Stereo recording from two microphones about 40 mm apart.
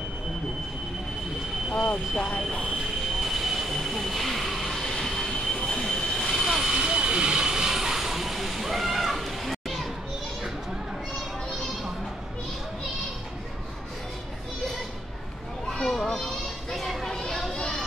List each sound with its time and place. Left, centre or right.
1.7 s speech: centre
3.2 s train: centre
6.3 s vehicle: centre
6.6 s vehicle: right; by 9.8 s centre
15.8 s children playing: centre